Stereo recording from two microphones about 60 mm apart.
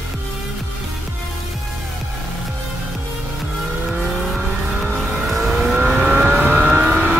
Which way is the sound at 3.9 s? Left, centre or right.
Centre.